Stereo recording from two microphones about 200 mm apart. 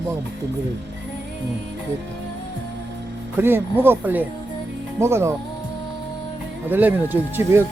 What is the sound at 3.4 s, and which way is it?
Speech, 10° right (ahead or behind).